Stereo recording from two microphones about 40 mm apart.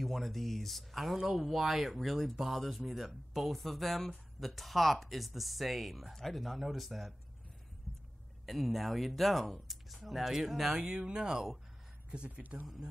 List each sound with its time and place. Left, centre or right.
0.0 s speech: centre
8.5 s speech: centre
10.7 s speech: right
12.3 s a man's voice: right